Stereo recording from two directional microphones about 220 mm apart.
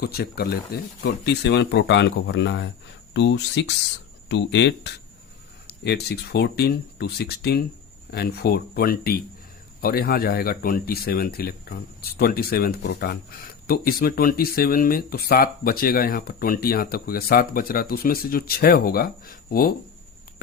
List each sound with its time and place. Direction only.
0.0 s speech: 45° left (ahead or behind)